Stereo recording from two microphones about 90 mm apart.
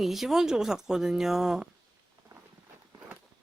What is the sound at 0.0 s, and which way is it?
Speech, 5° right (ahead or behind).